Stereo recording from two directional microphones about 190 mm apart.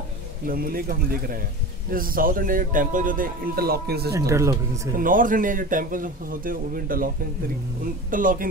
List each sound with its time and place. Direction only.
0.5 s speech: 50° right (ahead or behind)
4.3 s speech: 15° right (ahead or behind)
4.9 s speech: 45° right (ahead or behind)